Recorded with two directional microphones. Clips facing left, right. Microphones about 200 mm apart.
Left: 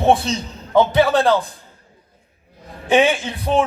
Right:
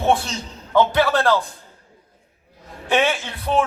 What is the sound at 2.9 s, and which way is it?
Speech, 20° left (ahead or behind).